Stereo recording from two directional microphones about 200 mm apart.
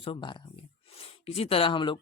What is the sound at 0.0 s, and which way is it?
Speech, 25° left (ahead or behind).